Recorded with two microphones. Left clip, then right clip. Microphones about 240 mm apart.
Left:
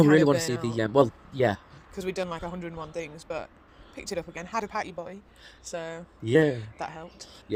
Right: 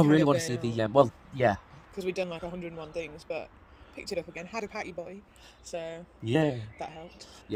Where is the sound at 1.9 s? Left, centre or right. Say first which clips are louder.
Left 1 dB; left.